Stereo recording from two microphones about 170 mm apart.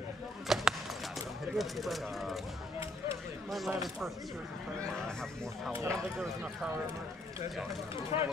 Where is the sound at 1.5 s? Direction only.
Centre (ahead or behind).